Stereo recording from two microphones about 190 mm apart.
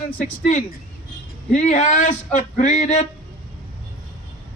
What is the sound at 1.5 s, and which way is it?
Speech, 40° left (ahead or behind).